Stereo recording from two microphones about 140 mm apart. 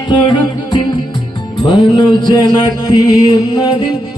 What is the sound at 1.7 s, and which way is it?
Mantra, 30° left (ahead or behind).